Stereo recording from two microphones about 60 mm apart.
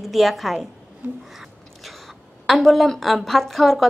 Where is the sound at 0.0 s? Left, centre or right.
Centre.